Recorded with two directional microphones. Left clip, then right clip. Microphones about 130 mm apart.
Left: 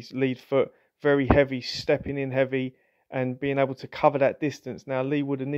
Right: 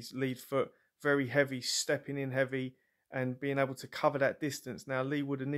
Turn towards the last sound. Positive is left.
turn(degrees=20)  # may be behind; listen again after turning